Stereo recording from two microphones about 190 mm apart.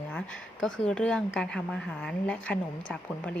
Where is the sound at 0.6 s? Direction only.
5° left (ahead or behind).